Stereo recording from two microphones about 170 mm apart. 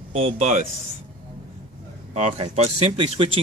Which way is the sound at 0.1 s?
40° right (ahead or behind).